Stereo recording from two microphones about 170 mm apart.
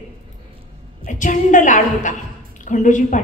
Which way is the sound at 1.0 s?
50° left (ahead or behind).